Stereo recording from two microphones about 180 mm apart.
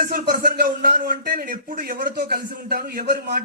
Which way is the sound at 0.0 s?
55° right (ahead or behind).